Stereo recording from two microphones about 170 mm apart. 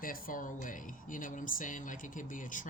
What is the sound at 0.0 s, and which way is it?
Speech, 55° left (ahead or behind).